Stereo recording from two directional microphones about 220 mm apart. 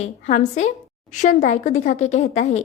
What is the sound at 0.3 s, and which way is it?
A woman's voice, 30° left (ahead or behind).